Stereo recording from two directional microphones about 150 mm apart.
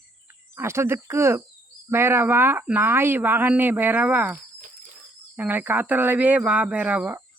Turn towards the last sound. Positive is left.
turn(degrees=-10)  # may be behind; listen again after turning